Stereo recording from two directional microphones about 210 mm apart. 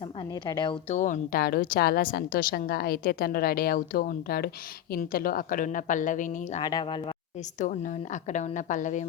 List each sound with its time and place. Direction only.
0.2 s speech: 20° left (ahead or behind)
0.9 s a woman's voice: 40° left (ahead or behind)
6.6 s speech: 20° left (ahead or behind)
7.6 s a woman's voice: 35° left (ahead or behind)